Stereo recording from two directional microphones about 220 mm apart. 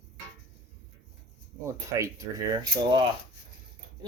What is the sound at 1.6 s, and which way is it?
Speech, 15° right (ahead or behind).